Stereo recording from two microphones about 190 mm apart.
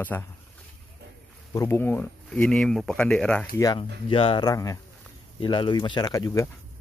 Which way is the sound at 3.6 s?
20° left (ahead or behind).